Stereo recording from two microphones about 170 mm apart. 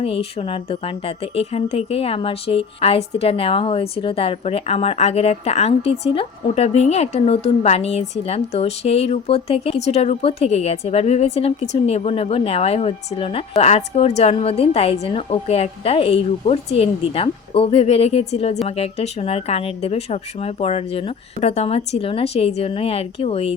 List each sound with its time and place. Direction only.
0.0 s a woman's voice: 35° left (ahead or behind)